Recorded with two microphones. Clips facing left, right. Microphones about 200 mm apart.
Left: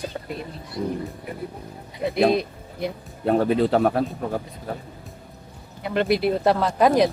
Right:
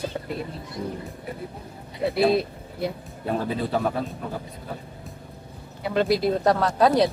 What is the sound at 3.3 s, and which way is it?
Speech, 65° left (ahead or behind).